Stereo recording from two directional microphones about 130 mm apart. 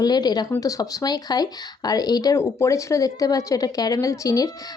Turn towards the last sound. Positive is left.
turn(degrees=25)  # may be behind; listen again after turning